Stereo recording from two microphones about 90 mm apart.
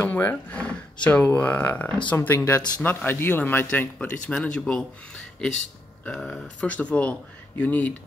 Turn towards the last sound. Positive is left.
turn(degrees=20)  # may be behind; listen again after turning